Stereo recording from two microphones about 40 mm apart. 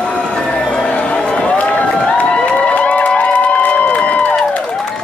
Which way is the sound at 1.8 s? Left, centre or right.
Left.